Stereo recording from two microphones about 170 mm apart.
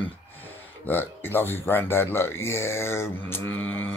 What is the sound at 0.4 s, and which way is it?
Speech, 10° left (ahead or behind).